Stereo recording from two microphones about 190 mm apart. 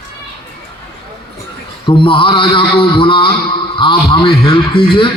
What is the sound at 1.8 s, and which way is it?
A man's voice, 25° left (ahead or behind).